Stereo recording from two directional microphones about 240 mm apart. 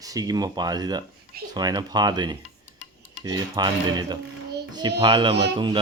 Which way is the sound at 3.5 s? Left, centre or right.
Centre.